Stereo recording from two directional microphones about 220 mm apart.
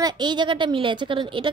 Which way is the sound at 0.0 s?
20° right (ahead or behind).